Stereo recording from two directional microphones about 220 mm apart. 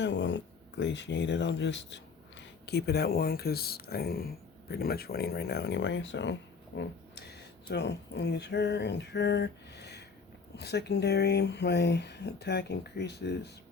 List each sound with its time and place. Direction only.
0.0 s speech: 55° left (ahead or behind)